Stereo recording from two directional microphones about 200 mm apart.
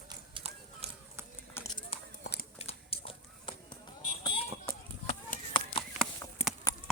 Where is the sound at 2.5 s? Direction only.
30° left (ahead or behind).